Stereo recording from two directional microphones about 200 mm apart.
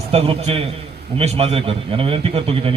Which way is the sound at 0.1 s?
30° right (ahead or behind).